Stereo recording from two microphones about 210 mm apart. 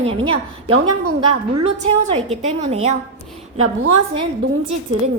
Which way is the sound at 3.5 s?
80° right.